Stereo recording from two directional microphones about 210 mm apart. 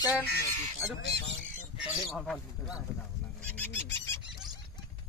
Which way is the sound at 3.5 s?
10° left (ahead or behind).